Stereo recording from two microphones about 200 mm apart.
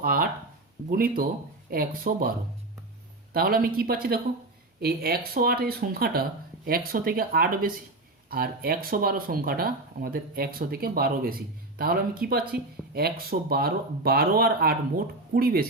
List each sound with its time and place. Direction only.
0.0 s speech: 50° right (ahead or behind)
3.3 s speech: 45° right (ahead or behind)